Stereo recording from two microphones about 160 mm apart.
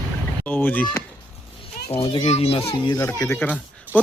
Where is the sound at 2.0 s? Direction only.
30° left (ahead or behind).